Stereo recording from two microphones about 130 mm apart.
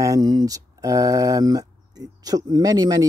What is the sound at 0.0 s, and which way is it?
Speech, 25° right (ahead or behind).